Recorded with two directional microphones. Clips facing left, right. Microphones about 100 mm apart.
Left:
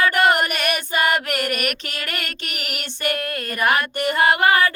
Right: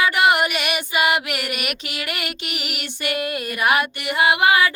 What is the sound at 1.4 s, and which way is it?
Female singing, 45° left (ahead or behind).